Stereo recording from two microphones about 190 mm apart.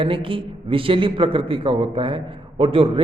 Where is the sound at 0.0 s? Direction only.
30° right (ahead or behind).